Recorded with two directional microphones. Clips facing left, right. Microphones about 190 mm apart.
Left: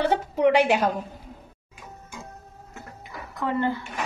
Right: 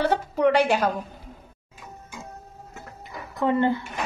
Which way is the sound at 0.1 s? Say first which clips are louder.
Even; 20° left (ahead or behind).